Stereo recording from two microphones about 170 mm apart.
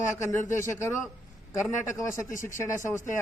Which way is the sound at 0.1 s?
15° left (ahead or behind).